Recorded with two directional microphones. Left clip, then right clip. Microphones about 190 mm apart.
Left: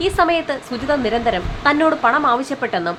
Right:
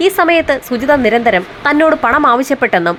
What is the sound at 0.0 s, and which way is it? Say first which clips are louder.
A woman's voice: right 6 dB; 25° right (ahead or behind).